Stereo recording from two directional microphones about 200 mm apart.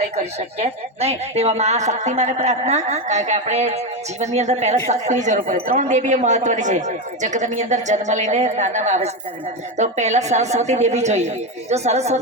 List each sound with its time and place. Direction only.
0.0 s a woman's voice: 30° right (ahead or behind)